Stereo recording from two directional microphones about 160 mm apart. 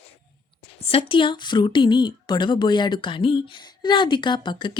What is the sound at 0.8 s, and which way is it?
Speech, 35° left (ahead or behind).